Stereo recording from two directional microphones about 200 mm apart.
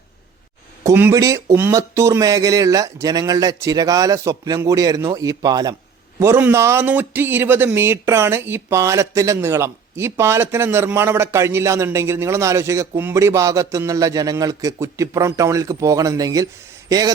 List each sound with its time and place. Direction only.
0.9 s speech: 15° right (ahead or behind)